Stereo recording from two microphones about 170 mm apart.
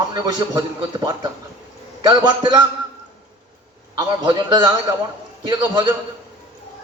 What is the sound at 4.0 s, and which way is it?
Mantra, 25° right (ahead or behind).